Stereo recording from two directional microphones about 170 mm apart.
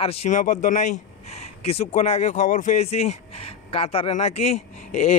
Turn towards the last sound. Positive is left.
turn(degrees=40)  # may be behind; listen again after turning